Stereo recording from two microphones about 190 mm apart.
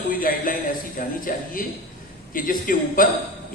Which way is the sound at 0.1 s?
50° left (ahead or behind).